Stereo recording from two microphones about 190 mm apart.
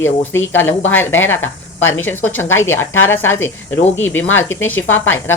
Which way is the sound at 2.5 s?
90° left.